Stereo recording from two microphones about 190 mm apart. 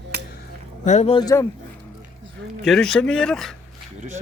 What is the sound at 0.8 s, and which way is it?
Speech, 35° left (ahead or behind).